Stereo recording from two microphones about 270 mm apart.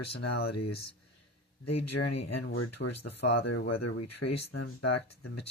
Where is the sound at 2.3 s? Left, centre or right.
Left.